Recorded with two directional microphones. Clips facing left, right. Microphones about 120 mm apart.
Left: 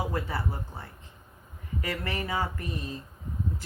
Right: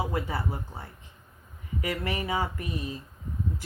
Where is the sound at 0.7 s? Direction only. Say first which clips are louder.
Right 1 dB; centre (ahead or behind).